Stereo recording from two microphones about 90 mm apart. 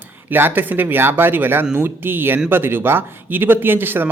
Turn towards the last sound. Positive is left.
turn(degrees=-20)  # may be behind; listen again after turning